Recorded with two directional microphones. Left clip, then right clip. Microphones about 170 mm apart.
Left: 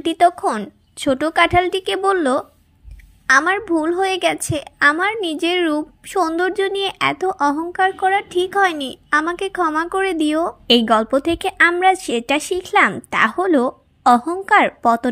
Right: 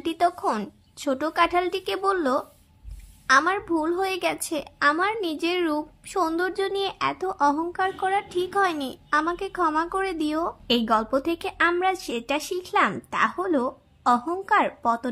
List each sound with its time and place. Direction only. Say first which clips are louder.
0.0 s a woman's voice: left 8 dB; 20° left (ahead or behind)